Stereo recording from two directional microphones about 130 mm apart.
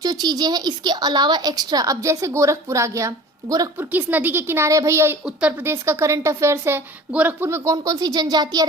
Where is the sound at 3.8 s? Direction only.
15° right (ahead or behind).